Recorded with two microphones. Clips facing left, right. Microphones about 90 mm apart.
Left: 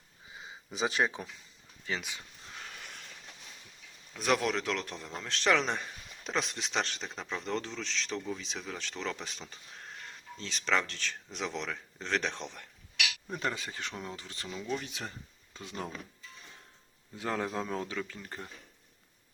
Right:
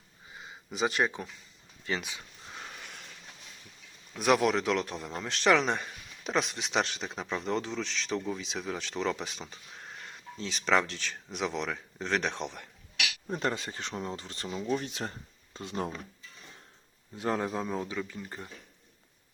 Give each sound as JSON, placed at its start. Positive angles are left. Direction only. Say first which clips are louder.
{"t": 0.8, "sound": "speech", "louder": "right 2 dB", "side_deg": 0}
{"t": 4.2, "sound": "speech", "louder": "right 4 dB", "side_deg": -10}
{"t": 5.4, "sound": "speech", "louder": "right 3 dB", "side_deg": -5}
{"t": 13.2, "sound": "speech", "louder": "right 6 dB", "side_deg": -30}
{"t": 17.2, "sound": "speech", "louder": "right 3 dB", "side_deg": -30}
{"t": 17.4, "sound": "speech", "louder": "right 2 dB", "side_deg": -10}